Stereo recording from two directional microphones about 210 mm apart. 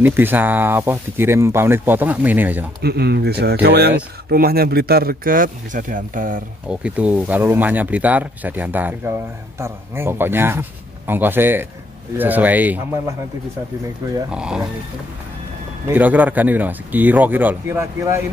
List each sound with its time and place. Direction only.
0.0 s speech: 10° right (ahead or behind)
2.8 s speech: 50° right (ahead or behind)
6.7 s speech: 5° right (ahead or behind)
14.3 s speech: 5° right (ahead or behind)
15.9 s speech: 10° right (ahead or behind)